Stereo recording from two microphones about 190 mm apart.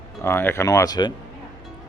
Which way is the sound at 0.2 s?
10° left (ahead or behind).